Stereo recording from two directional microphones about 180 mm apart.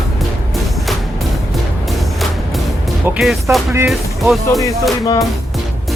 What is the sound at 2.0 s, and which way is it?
Music, centre (ahead or behind).